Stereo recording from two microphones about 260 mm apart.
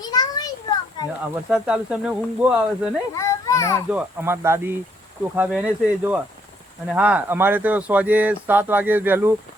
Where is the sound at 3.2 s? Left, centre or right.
Centre.